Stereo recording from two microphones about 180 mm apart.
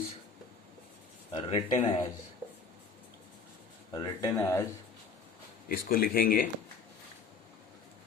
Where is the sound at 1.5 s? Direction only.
35° left (ahead or behind).